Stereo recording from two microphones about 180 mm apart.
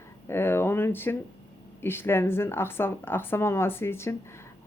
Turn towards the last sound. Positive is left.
turn(degrees=15)  # may be behind; listen again after turning